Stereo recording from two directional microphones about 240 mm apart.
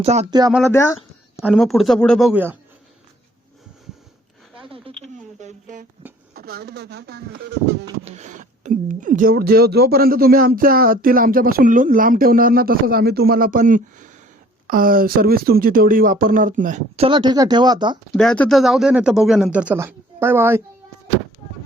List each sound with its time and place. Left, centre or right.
0.0 s speech: right
0.7 s speech: centre
1.4 s speech: centre
4.7 s a sound: right
6.3 s speech: right
8.0 s speech: right
18.2 s speech: centre